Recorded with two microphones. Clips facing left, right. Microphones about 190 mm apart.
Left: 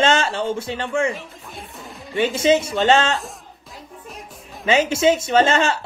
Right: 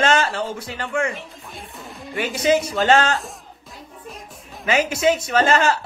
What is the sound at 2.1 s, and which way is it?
Speech, 25° left (ahead or behind).